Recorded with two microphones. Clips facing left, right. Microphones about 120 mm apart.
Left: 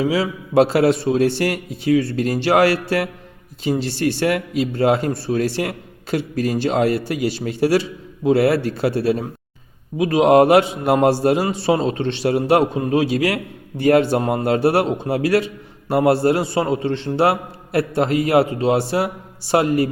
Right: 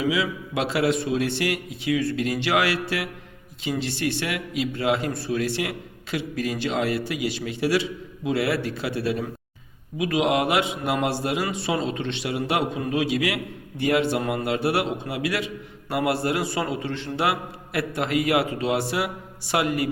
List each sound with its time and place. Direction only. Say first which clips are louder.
0.0 s a man's voice: left 5 dB; 35° left (ahead or behind)